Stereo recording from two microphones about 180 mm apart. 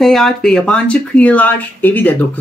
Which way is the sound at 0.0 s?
Centre (ahead or behind).